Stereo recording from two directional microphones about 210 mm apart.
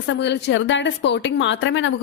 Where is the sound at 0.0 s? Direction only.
55° left (ahead or behind).